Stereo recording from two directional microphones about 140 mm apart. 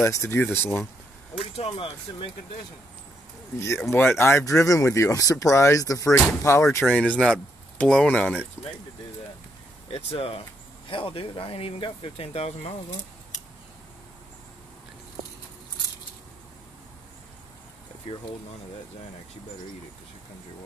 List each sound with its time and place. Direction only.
0.0 s speech: 20° left (ahead or behind)
1.4 s speech: 45° left (ahead or behind)
3.5 s speech: 20° left (ahead or behind)
9.8 s speech: 45° left (ahead or behind)